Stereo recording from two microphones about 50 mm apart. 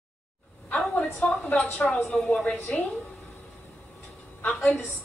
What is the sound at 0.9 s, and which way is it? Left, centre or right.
A woman's voice, left.